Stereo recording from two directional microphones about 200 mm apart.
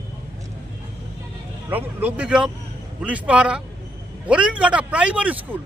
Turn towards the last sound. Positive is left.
turn(degrees=-5)  # may be behind; listen again after turning